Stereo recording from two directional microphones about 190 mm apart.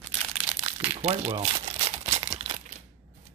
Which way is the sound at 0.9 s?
35° right (ahead or behind).